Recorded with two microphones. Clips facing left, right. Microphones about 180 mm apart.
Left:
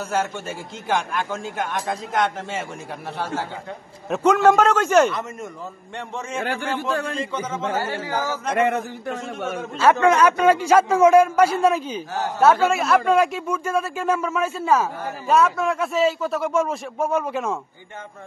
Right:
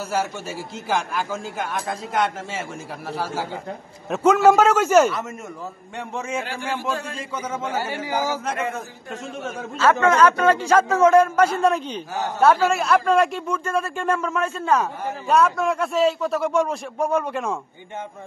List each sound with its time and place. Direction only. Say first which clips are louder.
0.1 s a man's voice: left 1 dB; 5° right (ahead or behind)
6.4 s a man's voice: left 2 dB; 60° left (ahead or behind)
7.2 s a man's voice: left 2 dB; 10° right (ahead or behind)
8.6 s a man's voice: left 7 dB; 75° left (ahead or behind)
9.8 s a man's voice: left 1 dB; 15° left (ahead or behind)